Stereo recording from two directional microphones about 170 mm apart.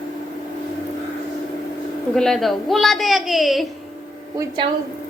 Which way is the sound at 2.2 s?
Centre (ahead or behind).